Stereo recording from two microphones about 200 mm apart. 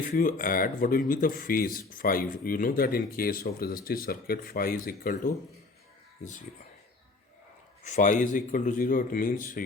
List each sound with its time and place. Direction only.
0.0 s speech: 45° left (ahead or behind)
7.9 s speech: 40° left (ahead or behind)